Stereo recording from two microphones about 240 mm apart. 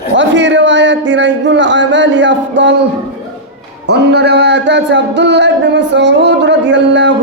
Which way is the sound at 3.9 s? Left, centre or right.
Right.